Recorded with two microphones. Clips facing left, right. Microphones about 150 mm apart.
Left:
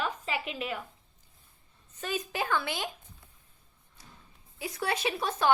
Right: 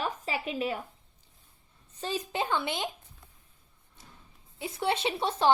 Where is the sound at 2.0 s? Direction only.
30° right (ahead or behind).